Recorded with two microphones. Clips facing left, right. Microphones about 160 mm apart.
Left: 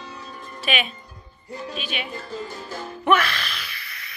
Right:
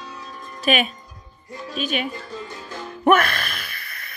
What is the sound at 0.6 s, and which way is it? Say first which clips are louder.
Speech: right 6 dB; 40° right (ahead or behind).